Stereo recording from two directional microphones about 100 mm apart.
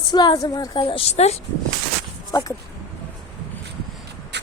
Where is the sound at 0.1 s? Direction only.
45° left (ahead or behind).